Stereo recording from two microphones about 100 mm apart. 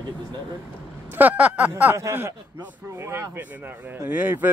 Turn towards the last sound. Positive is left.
turn(degrees=-20)  # may be behind; listen again after turning